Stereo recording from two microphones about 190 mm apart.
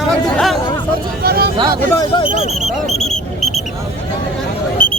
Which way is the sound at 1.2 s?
55° right (ahead or behind).